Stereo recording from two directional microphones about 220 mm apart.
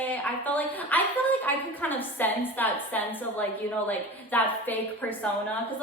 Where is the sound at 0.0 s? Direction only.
10° left (ahead or behind).